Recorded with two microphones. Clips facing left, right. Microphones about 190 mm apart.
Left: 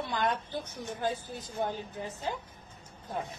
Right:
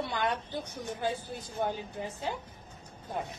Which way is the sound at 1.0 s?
10° right (ahead or behind).